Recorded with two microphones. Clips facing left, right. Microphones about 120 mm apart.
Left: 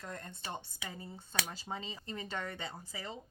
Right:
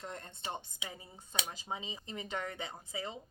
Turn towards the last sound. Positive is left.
turn(degrees=-20)  # may be behind; listen again after turning